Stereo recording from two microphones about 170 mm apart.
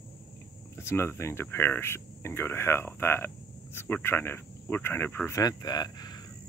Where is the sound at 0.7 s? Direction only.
15° left (ahead or behind).